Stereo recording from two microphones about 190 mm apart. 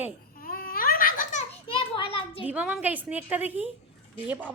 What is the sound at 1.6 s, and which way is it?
Children playing, 30° left (ahead or behind).